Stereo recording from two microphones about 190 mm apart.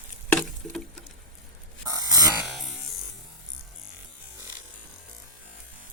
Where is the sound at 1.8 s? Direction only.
20° right (ahead or behind).